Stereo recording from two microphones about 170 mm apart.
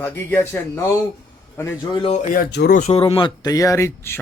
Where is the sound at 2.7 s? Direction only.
45° left (ahead or behind).